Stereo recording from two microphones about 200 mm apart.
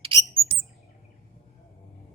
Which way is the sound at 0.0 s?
25° right (ahead or behind).